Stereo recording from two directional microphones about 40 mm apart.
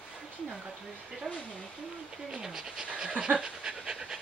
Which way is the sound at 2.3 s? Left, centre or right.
Centre.